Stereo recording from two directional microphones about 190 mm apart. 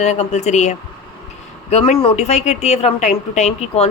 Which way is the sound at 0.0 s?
35° left (ahead or behind).